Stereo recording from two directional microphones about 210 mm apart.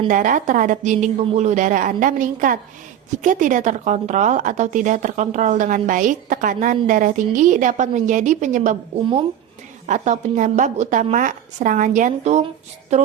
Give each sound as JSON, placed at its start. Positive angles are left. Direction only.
{"t": 0.1, "sound": "speech", "side_deg": -40}
{"t": 9.8, "sound": "speech", "side_deg": -35}